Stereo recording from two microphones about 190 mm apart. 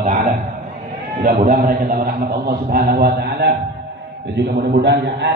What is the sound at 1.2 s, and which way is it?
Speech, 50° right (ahead or behind).